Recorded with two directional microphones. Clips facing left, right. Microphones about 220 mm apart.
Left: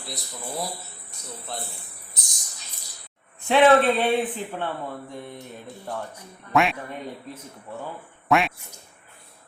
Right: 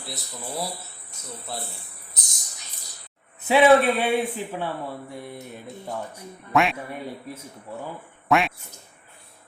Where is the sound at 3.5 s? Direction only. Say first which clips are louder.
Even; 10° right (ahead or behind).